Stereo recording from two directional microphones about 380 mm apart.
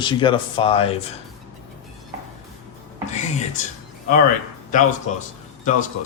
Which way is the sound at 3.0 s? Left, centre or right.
Centre.